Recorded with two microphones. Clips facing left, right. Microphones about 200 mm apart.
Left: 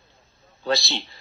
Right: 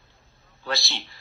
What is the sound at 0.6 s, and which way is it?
Speech, 25° left (ahead or behind).